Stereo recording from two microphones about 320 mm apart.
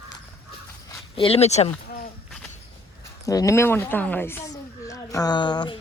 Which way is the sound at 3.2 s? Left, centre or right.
Centre.